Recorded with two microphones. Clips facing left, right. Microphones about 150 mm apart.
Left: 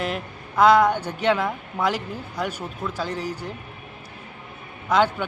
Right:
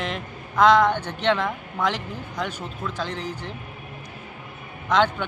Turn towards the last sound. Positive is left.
turn(degrees=10)  # may be behind; listen again after turning